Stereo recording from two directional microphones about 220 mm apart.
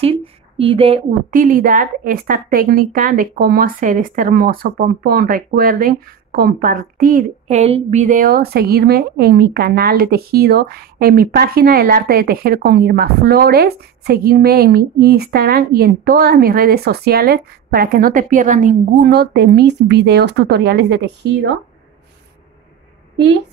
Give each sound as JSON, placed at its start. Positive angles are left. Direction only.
{"t": 0.0, "sound": "speech", "side_deg": -25}
{"t": 1.3, "sound": "speech", "side_deg": -40}